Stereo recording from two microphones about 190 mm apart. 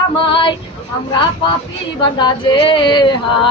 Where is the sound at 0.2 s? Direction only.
25° left (ahead or behind).